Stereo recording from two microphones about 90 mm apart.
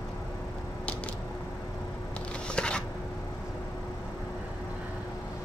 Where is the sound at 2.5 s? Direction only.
10° left (ahead or behind).